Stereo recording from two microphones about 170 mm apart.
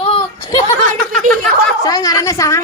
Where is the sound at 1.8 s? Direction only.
20° left (ahead or behind).